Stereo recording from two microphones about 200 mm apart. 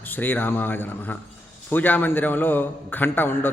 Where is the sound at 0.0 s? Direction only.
10° left (ahead or behind).